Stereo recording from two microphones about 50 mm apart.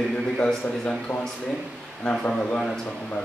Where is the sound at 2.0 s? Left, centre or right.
Centre.